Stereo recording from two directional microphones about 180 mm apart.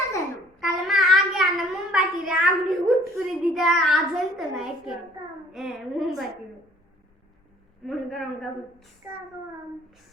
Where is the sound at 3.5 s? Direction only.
Centre (ahead or behind).